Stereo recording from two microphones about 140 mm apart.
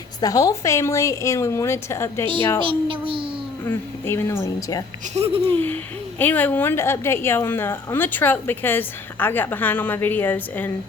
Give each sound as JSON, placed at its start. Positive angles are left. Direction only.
{"t": 0.2, "sound": "a woman's voice", "side_deg": 25}
{"t": 2.6, "sound": "a sound", "side_deg": -40}
{"t": 3.6, "sound": "a woman's voice", "side_deg": 15}
{"t": 5.1, "sound": "speech", "side_deg": -45}
{"t": 5.5, "sound": "a woman's voice", "side_deg": 15}